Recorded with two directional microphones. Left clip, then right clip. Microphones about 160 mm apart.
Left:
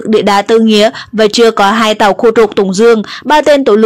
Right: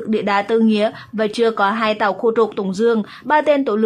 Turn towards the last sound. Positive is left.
turn(degrees=40)  # may be behind; listen again after turning